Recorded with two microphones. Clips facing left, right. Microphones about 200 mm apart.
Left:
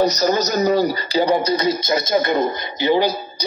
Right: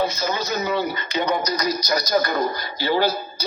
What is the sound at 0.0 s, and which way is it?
Music, 40° left (ahead or behind).